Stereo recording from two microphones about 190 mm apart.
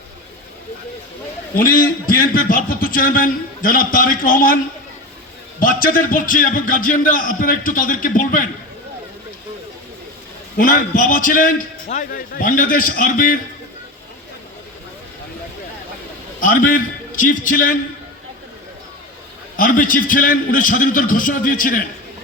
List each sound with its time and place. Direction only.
1.5 s a man's voice: 50° left (ahead or behind)
10.6 s a man's voice: 45° left (ahead or behind)
16.4 s a man's voice: 45° left (ahead or behind)
19.5 s a man's voice: 45° left (ahead or behind)